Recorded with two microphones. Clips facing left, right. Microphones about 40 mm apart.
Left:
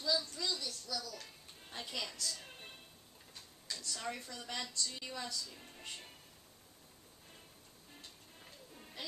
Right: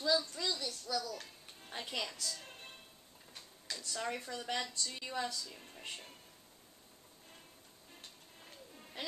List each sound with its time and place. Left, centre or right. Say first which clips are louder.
0.1 s a child's voice: right 3 dB; centre
0.4 s a sound: right 2 dB; centre
1.7 s a woman's voice: right 3 dB; centre
2.0 s a woman's voice: even; centre
3.7 s speech: right 3 dB; centre
4.1 s a woman's voice: right 5 dB; right
5.4 s speech: even; centre
7.9 s music: even; centre